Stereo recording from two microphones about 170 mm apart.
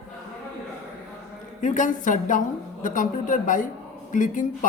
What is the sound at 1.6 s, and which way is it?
A woman's voice, 50° left (ahead or behind).